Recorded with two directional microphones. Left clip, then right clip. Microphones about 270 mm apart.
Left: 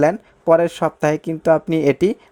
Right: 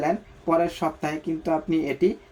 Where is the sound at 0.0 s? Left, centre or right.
Left.